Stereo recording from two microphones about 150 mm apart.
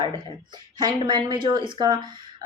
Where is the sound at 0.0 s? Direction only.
30° right (ahead or behind).